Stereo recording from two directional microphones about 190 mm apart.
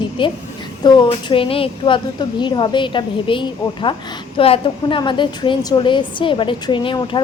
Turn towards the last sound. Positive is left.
turn(degrees=25)  # may be behind; listen again after turning